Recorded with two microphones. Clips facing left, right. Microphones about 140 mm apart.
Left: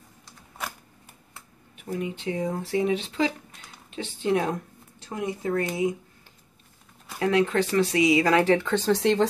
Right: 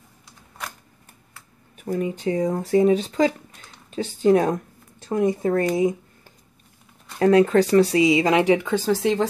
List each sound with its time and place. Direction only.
1.8 s speech: 40° right (ahead or behind)
7.2 s speech: 40° right (ahead or behind); by 9.2 s 5° right (ahead or behind)